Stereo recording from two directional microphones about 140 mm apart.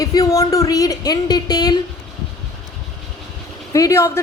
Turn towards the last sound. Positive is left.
turn(degrees=20)  # may be behind; listen again after turning